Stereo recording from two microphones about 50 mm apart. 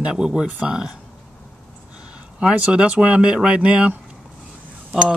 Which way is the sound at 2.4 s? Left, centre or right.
Right.